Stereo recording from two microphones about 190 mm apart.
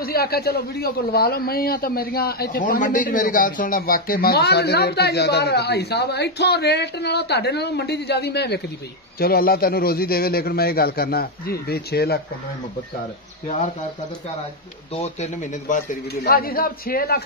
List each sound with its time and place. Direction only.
0.0 s a man's voice: 55° left (ahead or behind)
15.7 s a man's voice: 45° left (ahead or behind)